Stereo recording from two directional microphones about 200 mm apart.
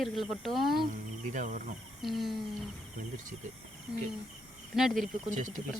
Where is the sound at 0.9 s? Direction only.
40° right (ahead or behind).